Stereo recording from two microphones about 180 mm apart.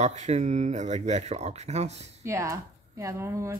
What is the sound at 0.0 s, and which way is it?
Speech, 40° right (ahead or behind).